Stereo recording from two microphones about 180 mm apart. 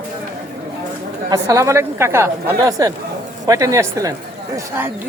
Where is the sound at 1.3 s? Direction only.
15° right (ahead or behind).